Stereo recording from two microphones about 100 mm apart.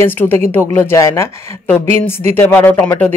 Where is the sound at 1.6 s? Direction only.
15° left (ahead or behind).